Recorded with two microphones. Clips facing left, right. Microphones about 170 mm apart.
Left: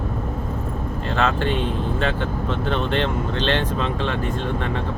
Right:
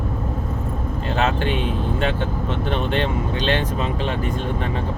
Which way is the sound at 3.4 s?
10° right (ahead or behind).